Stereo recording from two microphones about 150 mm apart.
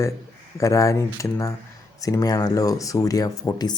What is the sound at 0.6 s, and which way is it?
Speech, 20° left (ahead or behind).